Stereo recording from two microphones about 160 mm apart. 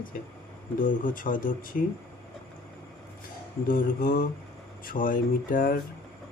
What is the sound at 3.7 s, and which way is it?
Speech, 60° left (ahead or behind).